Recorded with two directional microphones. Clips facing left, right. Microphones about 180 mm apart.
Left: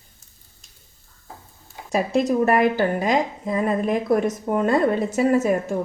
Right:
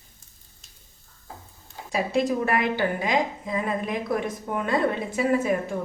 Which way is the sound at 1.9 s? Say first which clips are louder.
Left 4 dB; 45° left (ahead or behind).